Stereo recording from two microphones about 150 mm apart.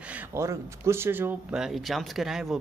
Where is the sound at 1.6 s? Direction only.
Centre (ahead or behind).